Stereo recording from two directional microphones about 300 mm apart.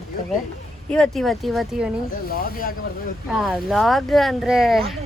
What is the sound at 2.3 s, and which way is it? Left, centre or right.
Speech, left.